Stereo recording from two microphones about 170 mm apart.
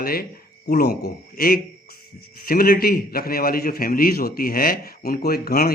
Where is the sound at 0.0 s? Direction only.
60° left (ahead or behind).